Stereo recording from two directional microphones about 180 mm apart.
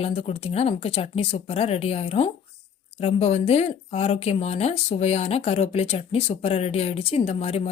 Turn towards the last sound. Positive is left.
turn(degrees=35)  # may be behind; listen again after turning